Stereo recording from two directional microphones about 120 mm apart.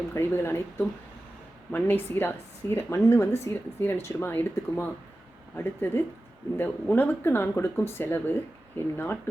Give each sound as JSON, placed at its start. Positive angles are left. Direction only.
{"t": 0.1, "sound": "speech", "side_deg": 20}